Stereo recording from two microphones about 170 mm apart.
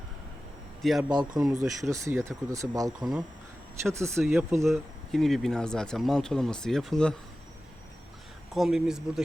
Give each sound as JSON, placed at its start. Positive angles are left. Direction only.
{"t": 0.8, "sound": "speech", "side_deg": 0}
{"t": 1.1, "sound": "speech", "side_deg": -25}
{"t": 4.2, "sound": "speech", "side_deg": 0}
{"t": 8.5, "sound": "speech", "side_deg": 0}